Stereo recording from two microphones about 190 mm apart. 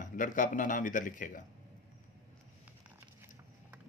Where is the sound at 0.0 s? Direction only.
45° left (ahead or behind).